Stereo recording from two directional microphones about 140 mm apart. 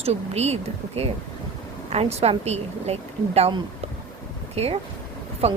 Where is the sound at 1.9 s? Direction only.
50° right (ahead or behind).